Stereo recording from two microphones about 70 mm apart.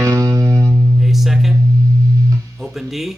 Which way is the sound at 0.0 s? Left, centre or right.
Right.